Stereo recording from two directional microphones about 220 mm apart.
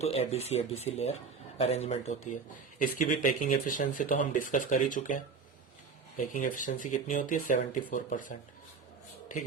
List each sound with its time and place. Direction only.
0.0 s speech: 30° left (ahead or behind)